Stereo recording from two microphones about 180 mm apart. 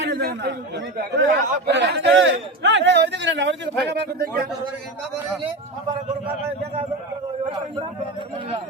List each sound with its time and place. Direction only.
0.0 s a man's voice: 65° right (ahead or behind); by 3.6 s 80° right
3.9 s speech: 60° right (ahead or behind)